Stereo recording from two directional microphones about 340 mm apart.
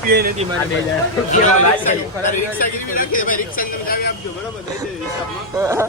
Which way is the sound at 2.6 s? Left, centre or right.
Left.